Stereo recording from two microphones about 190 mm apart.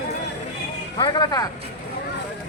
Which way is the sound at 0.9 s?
25° left (ahead or behind).